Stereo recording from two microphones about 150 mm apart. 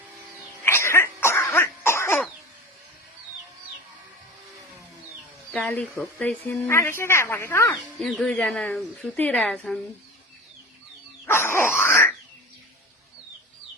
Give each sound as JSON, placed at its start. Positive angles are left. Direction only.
{"t": 0.6, "sound": "cough", "side_deg": 15}
{"t": 5.5, "sound": "speech", "side_deg": 10}
{"t": 7.9, "sound": "speech", "side_deg": 5}
{"t": 11.3, "sound": "dog", "side_deg": 15}